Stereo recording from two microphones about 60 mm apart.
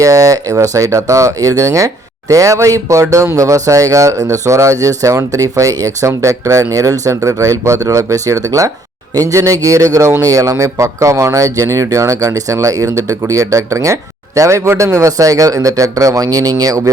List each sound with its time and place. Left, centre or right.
0.0 s speech: right
6.7 s speech: right